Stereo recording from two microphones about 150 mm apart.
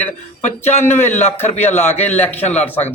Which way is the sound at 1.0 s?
50° left (ahead or behind).